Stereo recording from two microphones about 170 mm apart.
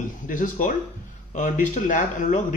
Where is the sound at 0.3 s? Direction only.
50° left (ahead or behind).